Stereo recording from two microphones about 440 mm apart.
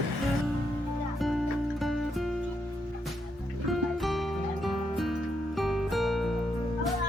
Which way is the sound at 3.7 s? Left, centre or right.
Centre.